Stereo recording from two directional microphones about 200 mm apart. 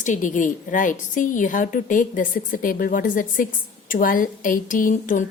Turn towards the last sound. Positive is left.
turn(degrees=40)  # may be behind; listen again after turning